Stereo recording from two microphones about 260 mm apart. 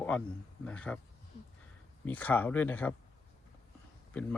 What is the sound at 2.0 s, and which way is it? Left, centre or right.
Speech, centre.